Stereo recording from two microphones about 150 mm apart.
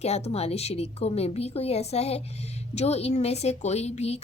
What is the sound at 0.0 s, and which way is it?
A woman's voice, 45° left (ahead or behind).